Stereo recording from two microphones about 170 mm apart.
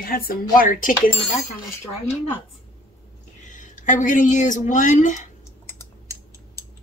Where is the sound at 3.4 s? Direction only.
50° left (ahead or behind).